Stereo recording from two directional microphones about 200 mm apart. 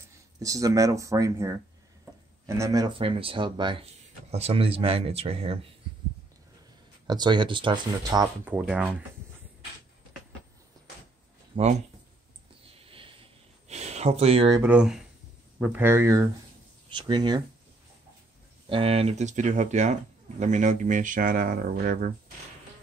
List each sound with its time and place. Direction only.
0.4 s speech: 15° right (ahead or behind)
7.1 s speech: 20° right (ahead or behind)
8.5 s speech: 5° right (ahead or behind)
11.5 s speech: 35° right (ahead or behind)
12.7 s a sound: 30° right (ahead or behind)
14.6 s speech: 5° right (ahead or behind); by 17.4 s 25° right (ahead or behind)
18.7 s speech: 30° right (ahead or behind); by 22.1 s 45° right (ahead or behind)